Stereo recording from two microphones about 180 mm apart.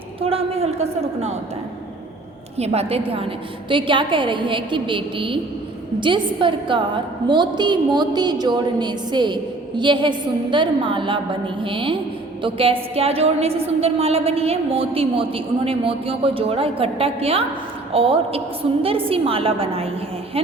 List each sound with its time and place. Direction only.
0.2 s a woman's voice: 30° right (ahead or behind)
2.6 s a woman's voice: 35° right (ahead or behind)